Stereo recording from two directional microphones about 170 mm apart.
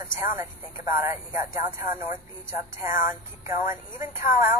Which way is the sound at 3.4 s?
15° right (ahead or behind).